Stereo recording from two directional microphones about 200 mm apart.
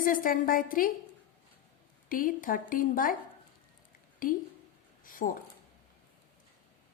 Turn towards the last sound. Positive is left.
turn(degrees=45)  # may be behind; listen again after turning